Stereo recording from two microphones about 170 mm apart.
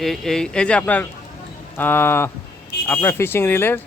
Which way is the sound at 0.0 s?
Centre (ahead or behind).